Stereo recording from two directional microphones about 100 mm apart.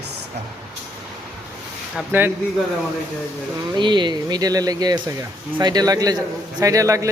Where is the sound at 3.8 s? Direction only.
50° right (ahead or behind).